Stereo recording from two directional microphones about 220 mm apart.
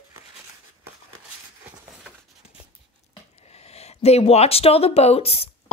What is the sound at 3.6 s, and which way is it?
Speech, 30° left (ahead or behind).